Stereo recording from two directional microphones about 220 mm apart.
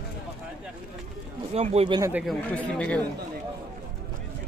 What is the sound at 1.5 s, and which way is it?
Speech, 30° right (ahead or behind).